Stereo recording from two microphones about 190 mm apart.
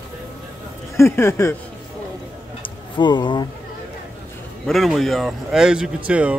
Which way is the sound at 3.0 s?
25° left (ahead or behind).